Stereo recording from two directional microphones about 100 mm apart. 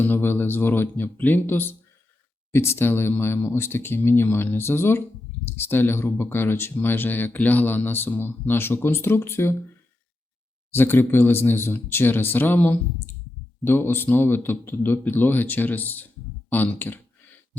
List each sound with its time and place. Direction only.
0.0 s speech: 20° left (ahead or behind)
10.7 s speech: 20° left (ahead or behind)